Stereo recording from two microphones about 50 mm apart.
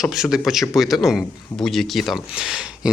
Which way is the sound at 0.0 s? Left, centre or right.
Centre.